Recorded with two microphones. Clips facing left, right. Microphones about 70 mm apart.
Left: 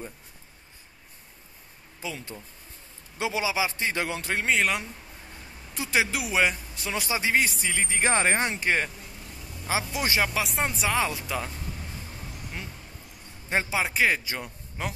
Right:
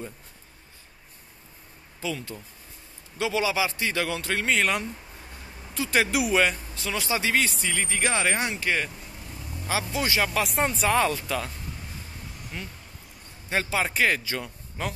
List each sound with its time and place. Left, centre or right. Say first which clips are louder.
2.0 s speech: right 4 dB; left
4.6 s speech: right 1 dB; centre
5.9 s speech: right 3 dB; centre
6.4 s speech: right 1 dB; left
8.1 s speech: left 3 dB; left
10.2 s speech: right 2 dB; centre
11.1 s speech: right 2 dB; centre
12.5 s speech: right 1 dB; centre